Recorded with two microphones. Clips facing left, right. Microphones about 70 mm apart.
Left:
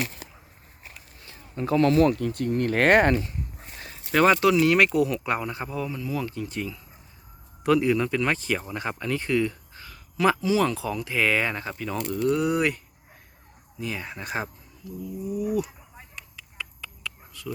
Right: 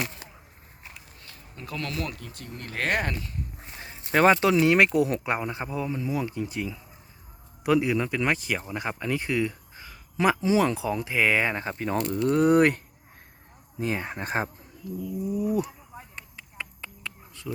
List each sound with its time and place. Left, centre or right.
1.2 s speech: left
2.2 s speech: left
3.8 s speech: right
13.7 s speech: right
16.1 s a sound: right